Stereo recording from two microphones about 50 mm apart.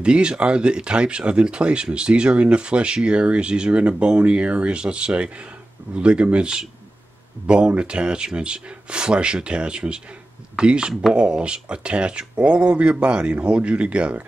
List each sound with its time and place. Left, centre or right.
0.0 s speech: centre